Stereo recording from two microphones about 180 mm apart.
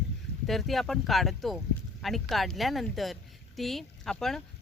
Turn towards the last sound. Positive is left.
turn(degrees=0)  # may be behind; listen again after turning